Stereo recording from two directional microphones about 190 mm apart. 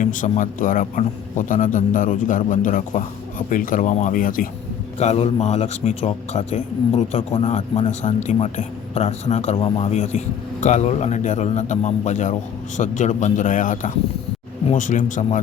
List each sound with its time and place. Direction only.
0.0 s a man's voice: 45° left (ahead or behind)
4.9 s a man's voice: 35° left (ahead or behind)